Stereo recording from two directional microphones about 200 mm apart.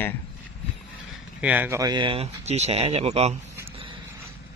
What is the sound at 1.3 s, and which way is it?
Speech, 5° right (ahead or behind).